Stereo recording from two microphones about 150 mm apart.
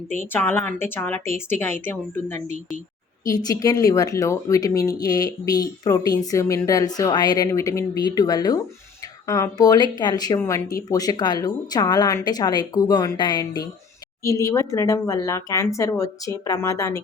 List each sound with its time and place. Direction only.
0.3 s a woman's voice: 15° left (ahead or behind)